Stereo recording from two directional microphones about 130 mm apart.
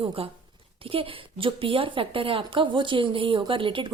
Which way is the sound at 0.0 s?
40° right (ahead or behind).